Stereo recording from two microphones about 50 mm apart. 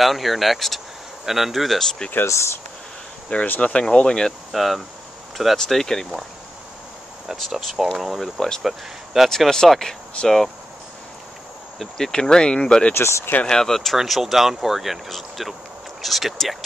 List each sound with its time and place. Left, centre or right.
0.0 s speech: centre
2.2 s speech: left
3.3 s speech: left
3.8 s speech: centre
4.5 s speech: centre
7.3 s speech: centre
8.6 s speech: centre
9.3 s speech: centre
11.8 s speech: centre
12.9 s speech: left
13.5 s speech: centre